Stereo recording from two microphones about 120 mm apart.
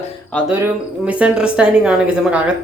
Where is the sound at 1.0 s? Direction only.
10° right (ahead or behind).